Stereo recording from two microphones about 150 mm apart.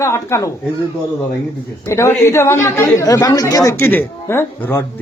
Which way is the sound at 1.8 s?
20° left (ahead or behind).